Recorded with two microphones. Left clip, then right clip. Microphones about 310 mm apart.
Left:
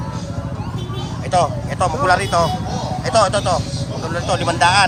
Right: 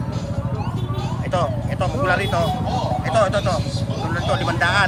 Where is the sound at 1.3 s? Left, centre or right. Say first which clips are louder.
Left 6 dB; centre.